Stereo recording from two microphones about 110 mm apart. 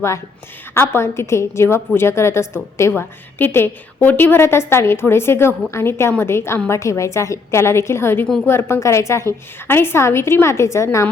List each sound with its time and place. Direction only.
0.7 s a woman's voice: 20° left (ahead or behind)